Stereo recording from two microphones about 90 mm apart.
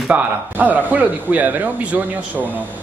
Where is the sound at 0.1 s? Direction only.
20° right (ahead or behind).